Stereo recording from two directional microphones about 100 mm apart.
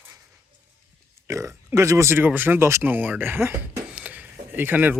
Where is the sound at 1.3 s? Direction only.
30° right (ahead or behind).